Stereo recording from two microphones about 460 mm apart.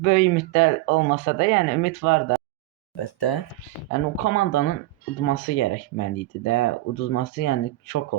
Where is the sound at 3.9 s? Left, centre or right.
Left.